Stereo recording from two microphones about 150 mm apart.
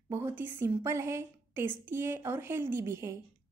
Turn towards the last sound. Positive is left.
turn(degrees=-20)  # may be behind; listen again after turning